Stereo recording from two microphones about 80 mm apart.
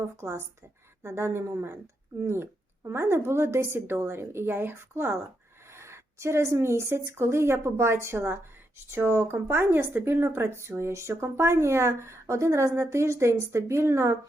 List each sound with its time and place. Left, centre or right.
0.2 s speech: right